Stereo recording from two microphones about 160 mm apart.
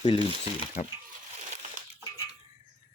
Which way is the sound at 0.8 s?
50° left (ahead or behind).